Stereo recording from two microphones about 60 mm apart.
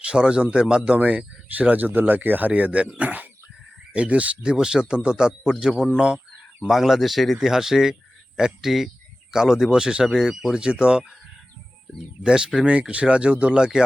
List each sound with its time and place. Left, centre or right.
0.0 s speech: centre
12.2 s speech: centre